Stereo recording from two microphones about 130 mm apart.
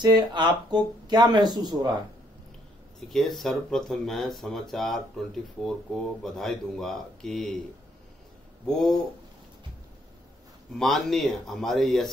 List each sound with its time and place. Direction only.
0.0 s speech: 35° right (ahead or behind)
3.1 s speech: centre (ahead or behind)
8.6 s speech: centre (ahead or behind)
10.7 s speech: centre (ahead or behind)